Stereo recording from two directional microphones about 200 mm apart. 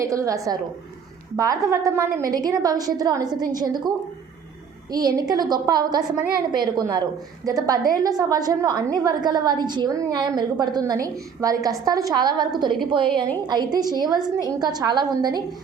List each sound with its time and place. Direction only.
0.0 s a woman's voice: 15° right (ahead or behind)
1.8 s a woman's voice: 15° right (ahead or behind)